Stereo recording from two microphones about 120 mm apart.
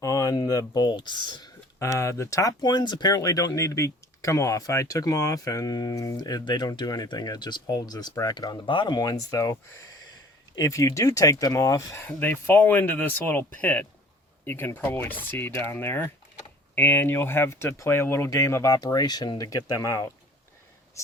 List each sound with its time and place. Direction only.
0.0 s speech: 30° left (ahead or behind)
1.8 s speech: 25° left (ahead or behind)
12.0 s speech: 15° left (ahead or behind)